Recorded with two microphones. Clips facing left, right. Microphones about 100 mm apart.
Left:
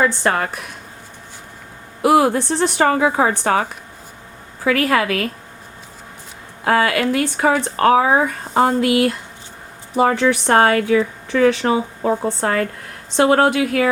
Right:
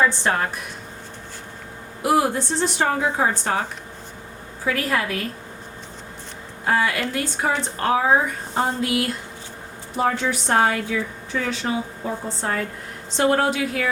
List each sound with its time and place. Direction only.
0.0 s a woman's voice: 85° left
2.0 s a woman's voice: 75° left (ahead or behind)
6.7 s speech: 80° left